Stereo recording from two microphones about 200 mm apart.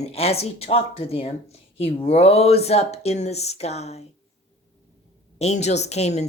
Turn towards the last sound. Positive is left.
turn(degrees=35)  # may be behind; listen again after turning